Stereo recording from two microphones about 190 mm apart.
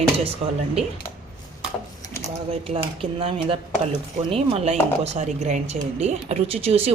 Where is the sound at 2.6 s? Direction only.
30° right (ahead or behind).